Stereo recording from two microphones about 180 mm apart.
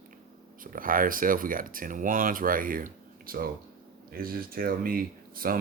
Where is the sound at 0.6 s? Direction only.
50° right (ahead or behind).